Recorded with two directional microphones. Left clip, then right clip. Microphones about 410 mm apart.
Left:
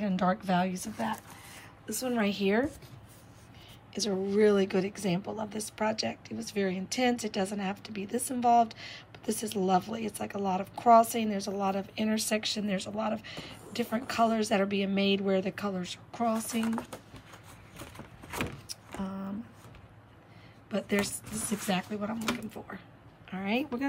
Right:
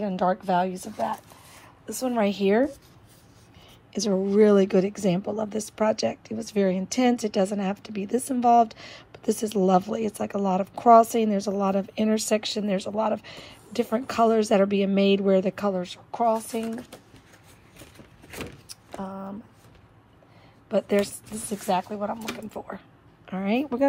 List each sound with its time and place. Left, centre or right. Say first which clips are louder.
0.0 s a woman's voice: right 5 dB; centre
3.9 s a woman's voice: right 6 dB; centre
18.9 s a sound: right 5 dB; centre
20.7 s a woman's voice: right 8 dB; centre